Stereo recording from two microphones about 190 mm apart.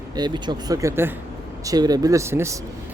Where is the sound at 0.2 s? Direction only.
25° right (ahead or behind).